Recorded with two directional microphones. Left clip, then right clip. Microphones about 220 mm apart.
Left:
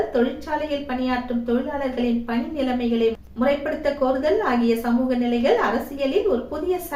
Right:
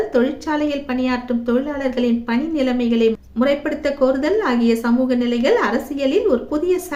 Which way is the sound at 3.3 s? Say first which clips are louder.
Right 3 dB; 50° right (ahead or behind).